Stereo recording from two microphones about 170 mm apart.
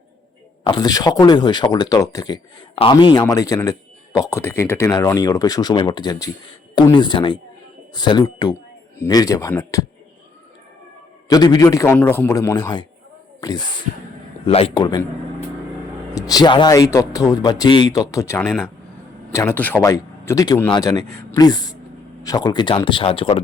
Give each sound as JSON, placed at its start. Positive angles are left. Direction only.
{"t": 0.6, "sound": "speech", "side_deg": 25}
{"t": 11.3, "sound": "speech", "side_deg": 25}
{"t": 16.1, "sound": "speech", "side_deg": 20}
{"t": 18.4, "sound": "speech", "side_deg": 0}
{"t": 19.3, "sound": "speech", "side_deg": 15}